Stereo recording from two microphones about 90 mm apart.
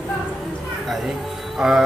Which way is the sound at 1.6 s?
5° right (ahead or behind).